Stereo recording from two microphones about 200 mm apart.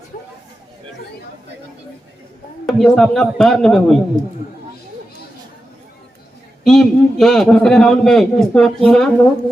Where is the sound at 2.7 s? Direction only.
Centre (ahead or behind).